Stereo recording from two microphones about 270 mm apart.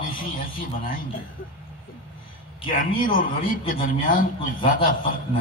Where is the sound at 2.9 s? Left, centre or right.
Left.